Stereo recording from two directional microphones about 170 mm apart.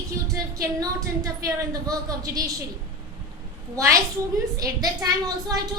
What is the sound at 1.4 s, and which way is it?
A woman's voice, 20° right (ahead or behind).